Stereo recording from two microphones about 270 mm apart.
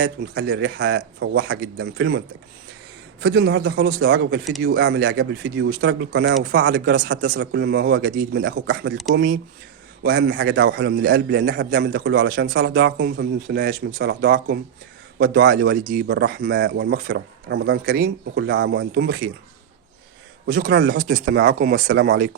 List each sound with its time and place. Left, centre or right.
0.0 s a man's voice: right
3.2 s speech: right
3.6 s a man's voice: right
4.0 s a man's voice: right
8.7 s a man's voice: right
20.5 s a man's voice: right
20.9 s a man's voice: right